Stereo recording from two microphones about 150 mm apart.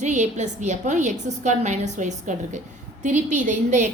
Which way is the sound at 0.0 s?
50° right (ahead or behind).